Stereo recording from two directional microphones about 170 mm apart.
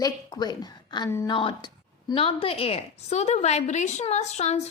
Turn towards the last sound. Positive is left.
turn(degrees=40)  # may be behind; listen again after turning